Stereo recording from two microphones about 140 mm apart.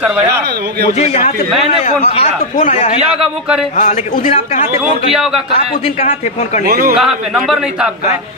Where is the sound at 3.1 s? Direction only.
5° right (ahead or behind).